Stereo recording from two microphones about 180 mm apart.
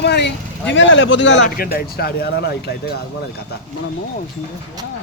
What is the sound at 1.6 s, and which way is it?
Speech, 55° left (ahead or behind).